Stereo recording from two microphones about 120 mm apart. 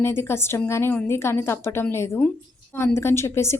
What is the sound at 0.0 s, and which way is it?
A woman's voice, 20° left (ahead or behind).